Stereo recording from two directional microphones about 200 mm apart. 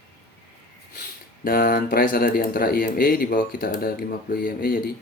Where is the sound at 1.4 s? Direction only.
45° left (ahead or behind).